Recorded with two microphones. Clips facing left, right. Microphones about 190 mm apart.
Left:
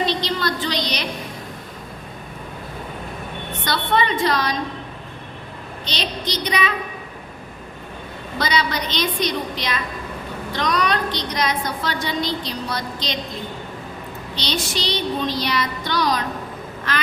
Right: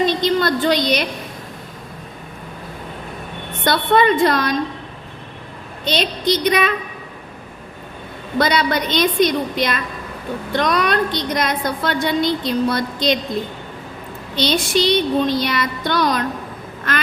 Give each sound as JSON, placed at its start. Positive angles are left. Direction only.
{"t": 0.0, "sound": "a sound", "side_deg": -50}
{"t": 3.6, "sound": "a woman's voice", "side_deg": -50}
{"t": 5.8, "sound": "a woman's voice", "side_deg": -50}
{"t": 8.4, "sound": "a woman's voice", "side_deg": -55}
{"t": 14.3, "sound": "a woman's voice", "side_deg": -55}